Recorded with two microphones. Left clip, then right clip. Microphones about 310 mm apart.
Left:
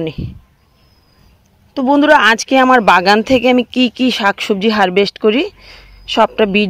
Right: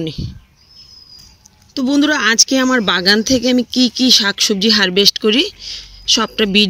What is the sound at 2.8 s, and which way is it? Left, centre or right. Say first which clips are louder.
Speech: left 7 dB; left.